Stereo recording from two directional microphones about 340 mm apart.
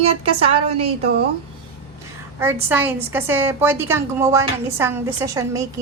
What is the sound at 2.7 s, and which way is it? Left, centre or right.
A woman's voice, centre.